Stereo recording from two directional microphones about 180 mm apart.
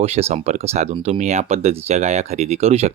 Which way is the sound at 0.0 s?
35° right (ahead or behind).